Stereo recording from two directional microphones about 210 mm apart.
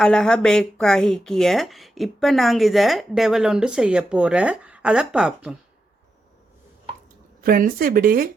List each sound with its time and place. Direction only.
0.0 s speech: 5° left (ahead or behind)
7.4 s speech: 45° right (ahead or behind)